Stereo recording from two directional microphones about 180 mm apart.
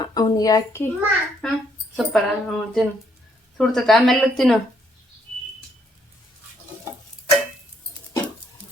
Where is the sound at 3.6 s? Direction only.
Centre (ahead or behind).